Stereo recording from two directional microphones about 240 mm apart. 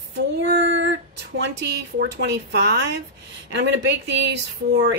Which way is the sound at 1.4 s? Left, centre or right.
Right.